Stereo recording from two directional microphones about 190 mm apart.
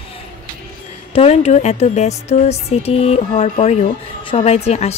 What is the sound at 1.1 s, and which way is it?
Speech, 30° left (ahead or behind).